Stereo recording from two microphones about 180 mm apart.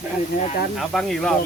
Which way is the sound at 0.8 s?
Centre (ahead or behind).